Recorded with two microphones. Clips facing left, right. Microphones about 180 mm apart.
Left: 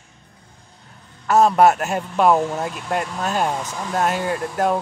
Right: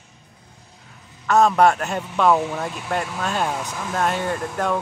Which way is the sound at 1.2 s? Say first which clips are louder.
Left 1 dB; 5° left (ahead or behind).